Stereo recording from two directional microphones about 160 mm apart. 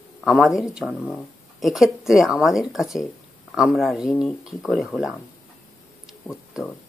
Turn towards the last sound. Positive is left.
turn(degrees=0)  # may be behind; listen again after turning